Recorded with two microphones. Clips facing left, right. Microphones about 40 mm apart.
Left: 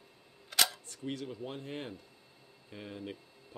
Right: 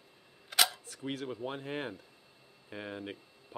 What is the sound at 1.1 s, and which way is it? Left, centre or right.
Speech, right.